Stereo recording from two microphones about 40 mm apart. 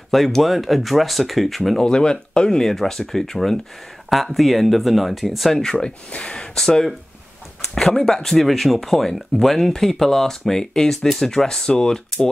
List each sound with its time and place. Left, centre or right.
0.1 s speech: centre
1.8 s speech: centre
4.1 s speech: centre
5.5 s speech: centre
6.5 s speech: centre